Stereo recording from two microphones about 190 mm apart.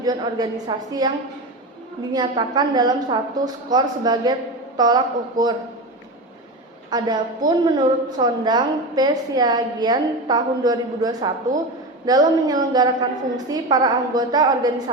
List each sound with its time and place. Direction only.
0.0 s a woman's voice: 20° right (ahead or behind)
2.1 s a woman's voice: 25° right (ahead or behind)
6.9 s a woman's voice: 20° right (ahead or behind)